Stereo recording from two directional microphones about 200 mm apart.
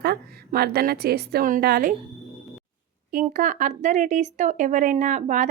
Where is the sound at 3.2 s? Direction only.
40° right (ahead or behind).